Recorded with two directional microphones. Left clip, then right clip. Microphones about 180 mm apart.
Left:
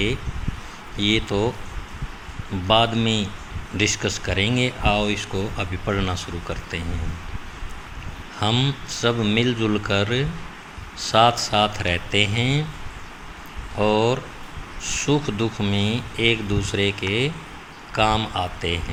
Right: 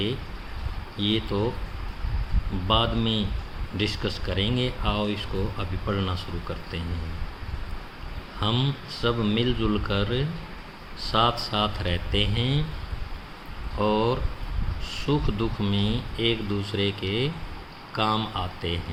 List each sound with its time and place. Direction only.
0.9 s speech: 20° left (ahead or behind)
2.6 s speech: 15° left (ahead or behind)
8.4 s speech: 15° left (ahead or behind)
13.7 s speech: 15° left (ahead or behind)